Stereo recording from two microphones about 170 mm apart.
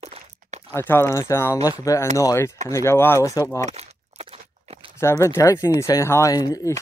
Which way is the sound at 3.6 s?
40° right (ahead or behind).